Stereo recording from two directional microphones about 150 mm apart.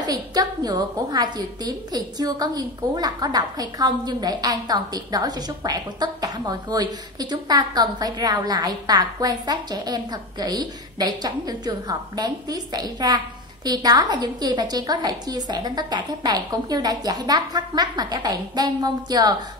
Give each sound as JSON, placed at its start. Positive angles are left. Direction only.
{"t": 0.0, "sound": "a woman's voice", "side_deg": -25}